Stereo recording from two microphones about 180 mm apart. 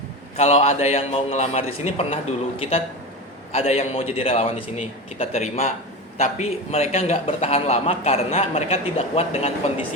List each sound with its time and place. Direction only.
0.3 s a man's voice: 35° left (ahead or behind)